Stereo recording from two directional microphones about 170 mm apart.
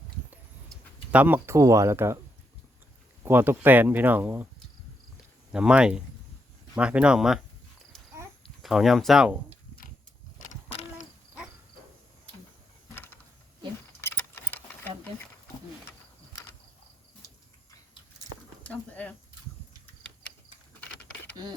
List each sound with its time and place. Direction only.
1.1 s speech: 10° right (ahead or behind)
3.2 s speech: 15° right (ahead or behind)
5.5 s speech: 5° right (ahead or behind)
8.4 s speech: centre (ahead or behind)
10.3 s vehicle: 45° left (ahead or behind)
14.0 s keys jangling: 15° left (ahead or behind)
18.6 s a sound: 10° left (ahead or behind)